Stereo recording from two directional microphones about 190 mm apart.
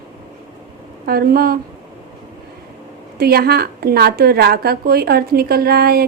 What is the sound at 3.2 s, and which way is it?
A woman's voice, 55° right (ahead or behind).